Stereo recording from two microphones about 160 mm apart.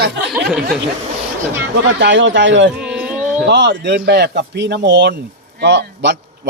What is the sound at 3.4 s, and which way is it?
A man's voice, 90° right.